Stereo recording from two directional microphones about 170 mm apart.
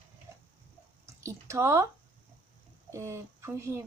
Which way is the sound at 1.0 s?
15° right (ahead or behind).